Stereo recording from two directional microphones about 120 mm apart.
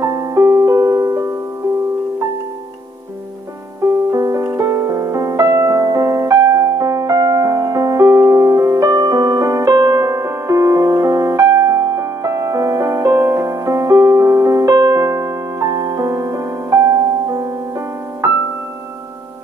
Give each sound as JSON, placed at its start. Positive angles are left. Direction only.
{"t": 0.0, "sound": "music", "side_deg": -25}
{"t": 3.8, "sound": "music", "side_deg": -25}